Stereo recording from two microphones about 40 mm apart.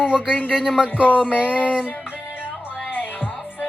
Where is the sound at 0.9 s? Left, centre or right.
Right.